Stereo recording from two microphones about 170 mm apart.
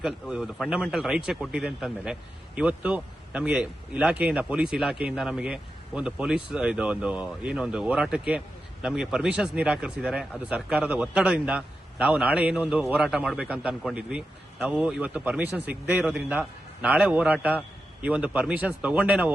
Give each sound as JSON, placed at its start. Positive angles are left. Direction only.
{"t": 0.0, "sound": "a man's voice", "side_deg": -5}